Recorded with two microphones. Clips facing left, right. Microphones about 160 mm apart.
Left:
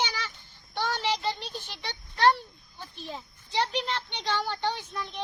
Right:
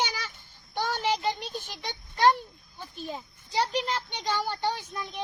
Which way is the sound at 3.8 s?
Centre (ahead or behind).